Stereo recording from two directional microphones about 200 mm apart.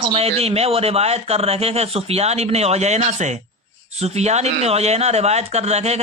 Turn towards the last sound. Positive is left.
turn(degrees=-30)  # may be behind; listen again after turning